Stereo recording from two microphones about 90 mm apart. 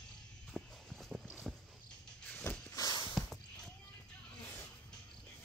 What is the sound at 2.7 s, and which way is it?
Horse, 45° left (ahead or behind).